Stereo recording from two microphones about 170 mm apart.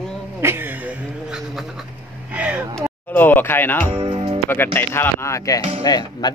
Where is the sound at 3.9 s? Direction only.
30° right (ahead or behind).